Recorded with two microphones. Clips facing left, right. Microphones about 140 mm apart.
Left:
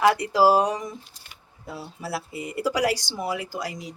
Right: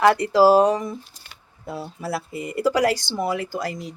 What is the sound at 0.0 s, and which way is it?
Speech, 5° left (ahead or behind).